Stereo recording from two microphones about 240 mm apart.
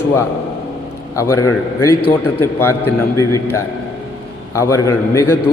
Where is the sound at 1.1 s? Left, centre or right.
Centre.